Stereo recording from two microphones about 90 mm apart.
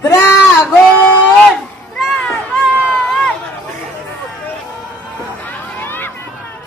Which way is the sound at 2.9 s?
5° left (ahead or behind).